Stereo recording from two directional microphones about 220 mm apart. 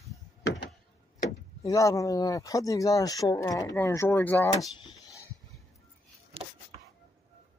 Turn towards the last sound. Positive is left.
turn(degrees=-25)  # may be behind; listen again after turning